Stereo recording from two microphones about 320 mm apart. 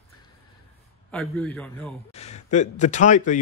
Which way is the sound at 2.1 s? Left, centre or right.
Centre.